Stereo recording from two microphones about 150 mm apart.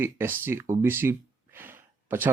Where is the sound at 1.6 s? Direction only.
15° right (ahead or behind).